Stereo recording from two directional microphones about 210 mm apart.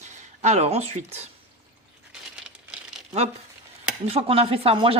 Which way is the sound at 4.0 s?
30° right (ahead or behind).